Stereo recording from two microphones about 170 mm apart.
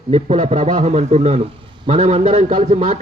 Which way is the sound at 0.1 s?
40° right (ahead or behind).